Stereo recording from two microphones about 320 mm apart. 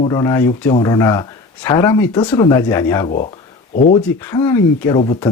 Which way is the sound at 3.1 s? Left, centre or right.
Left.